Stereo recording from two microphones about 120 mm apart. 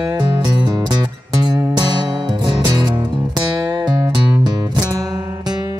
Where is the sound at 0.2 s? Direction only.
40° right (ahead or behind).